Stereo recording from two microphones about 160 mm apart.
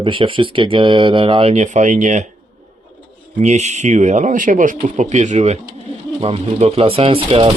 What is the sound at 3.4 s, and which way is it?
Speech, 45° right (ahead or behind).